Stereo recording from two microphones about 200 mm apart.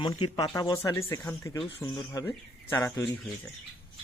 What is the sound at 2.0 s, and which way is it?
Speech, 15° left (ahead or behind).